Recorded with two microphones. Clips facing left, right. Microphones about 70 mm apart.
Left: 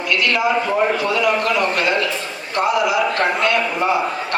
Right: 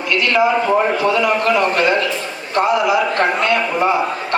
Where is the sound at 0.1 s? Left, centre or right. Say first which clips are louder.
Right 3 dB; right.